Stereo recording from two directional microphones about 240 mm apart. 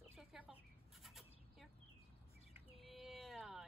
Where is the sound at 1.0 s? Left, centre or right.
Centre.